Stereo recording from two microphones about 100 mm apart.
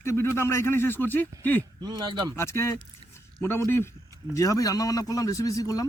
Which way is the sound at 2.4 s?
25° left (ahead or behind).